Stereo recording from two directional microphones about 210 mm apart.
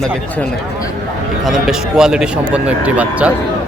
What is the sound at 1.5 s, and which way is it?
A woman's voice, centre (ahead or behind).